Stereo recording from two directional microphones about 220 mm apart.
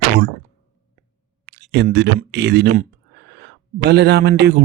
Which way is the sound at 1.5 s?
50° right (ahead or behind).